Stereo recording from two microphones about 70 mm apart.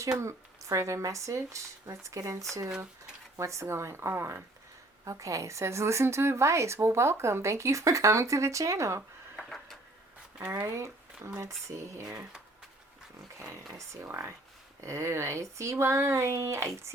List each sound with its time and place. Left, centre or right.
0.2 s speech: right
5.0 s speech: right
10.7 s speech: right
13.7 s speech: right